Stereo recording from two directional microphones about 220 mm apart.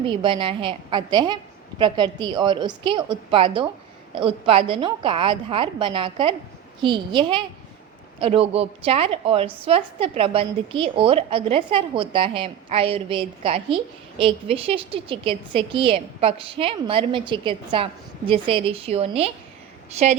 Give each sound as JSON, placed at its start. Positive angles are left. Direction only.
{"t": 0.0, "sound": "a woman's voice", "side_deg": -25}